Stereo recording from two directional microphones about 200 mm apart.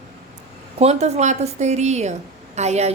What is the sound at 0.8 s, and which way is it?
A woman's voice, 35° right (ahead or behind).